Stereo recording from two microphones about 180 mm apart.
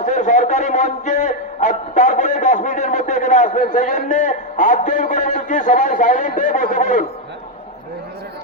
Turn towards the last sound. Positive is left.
turn(degrees=45)  # may be behind; listen again after turning